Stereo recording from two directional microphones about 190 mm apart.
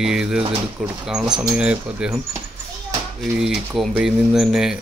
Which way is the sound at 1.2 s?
20° right (ahead or behind).